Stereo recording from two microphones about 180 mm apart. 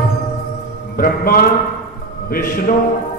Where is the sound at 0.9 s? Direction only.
55° left (ahead or behind).